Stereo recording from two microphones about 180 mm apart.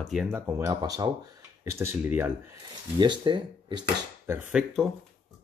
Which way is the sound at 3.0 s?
25° right (ahead or behind).